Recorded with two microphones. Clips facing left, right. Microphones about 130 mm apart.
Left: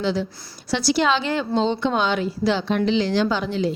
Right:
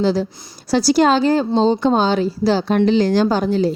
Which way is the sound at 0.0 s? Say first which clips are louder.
Right 6 dB; 40° right (ahead or behind).